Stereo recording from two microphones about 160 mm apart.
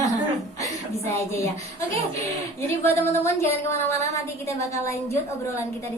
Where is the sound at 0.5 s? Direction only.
20° left (ahead or behind).